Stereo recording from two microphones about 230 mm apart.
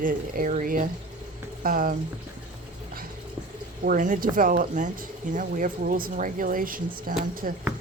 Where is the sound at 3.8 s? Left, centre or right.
Right.